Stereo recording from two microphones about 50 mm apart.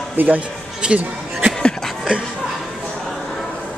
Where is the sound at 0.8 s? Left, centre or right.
Right.